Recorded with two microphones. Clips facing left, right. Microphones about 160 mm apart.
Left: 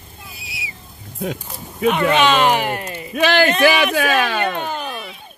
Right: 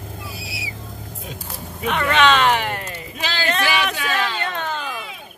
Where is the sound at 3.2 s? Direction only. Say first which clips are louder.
Left 9 dB; 65° left (ahead or behind).